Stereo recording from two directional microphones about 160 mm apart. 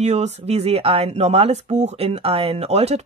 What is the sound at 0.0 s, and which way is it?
Speech, 45° right (ahead or behind).